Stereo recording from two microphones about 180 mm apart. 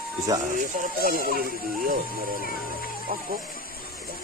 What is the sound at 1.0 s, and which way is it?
Speech, 55° right (ahead or behind).